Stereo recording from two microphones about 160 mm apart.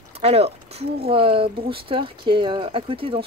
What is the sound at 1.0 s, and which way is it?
Speech, 35° right (ahead or behind).